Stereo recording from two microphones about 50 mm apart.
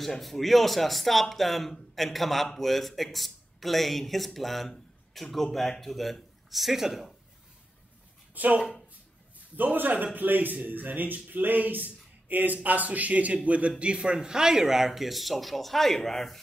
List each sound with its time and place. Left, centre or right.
0.0 s a man's voice: centre
8.4 s speech: right
9.6 s a man's voice: right; by 16.3 s centre